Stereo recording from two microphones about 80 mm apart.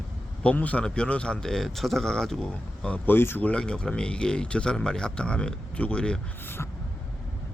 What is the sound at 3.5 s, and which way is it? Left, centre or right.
Speech, centre.